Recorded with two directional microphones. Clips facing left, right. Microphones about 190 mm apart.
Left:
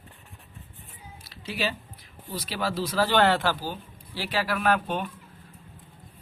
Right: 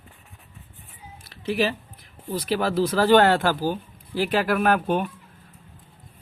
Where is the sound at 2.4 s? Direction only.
50° right (ahead or behind).